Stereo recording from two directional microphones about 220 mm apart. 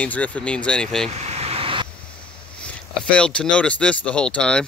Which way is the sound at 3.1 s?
5° left (ahead or behind).